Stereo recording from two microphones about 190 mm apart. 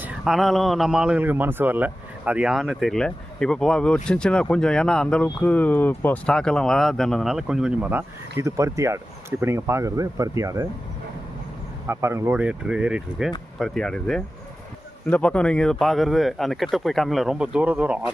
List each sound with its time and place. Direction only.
0.0 s a man's voice: centre (ahead or behind); by 10.7 s 15° right (ahead or behind)
11.9 s a man's voice: 15° right (ahead or behind)